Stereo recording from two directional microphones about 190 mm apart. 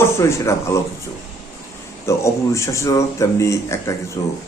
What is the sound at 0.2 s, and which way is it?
Speech, 15° left (ahead or behind).